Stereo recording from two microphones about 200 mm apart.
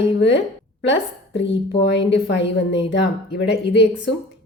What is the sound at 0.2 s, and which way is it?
A woman's voice, 60° left (ahead or behind).